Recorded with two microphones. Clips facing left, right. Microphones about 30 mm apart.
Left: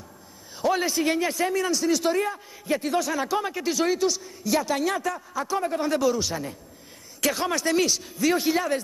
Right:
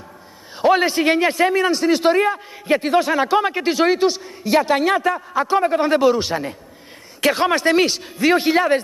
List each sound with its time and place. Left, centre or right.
0.6 s a man's voice: right